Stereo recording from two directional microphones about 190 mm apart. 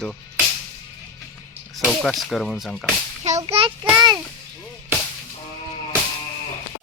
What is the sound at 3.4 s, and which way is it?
Speech, 25° right (ahead or behind).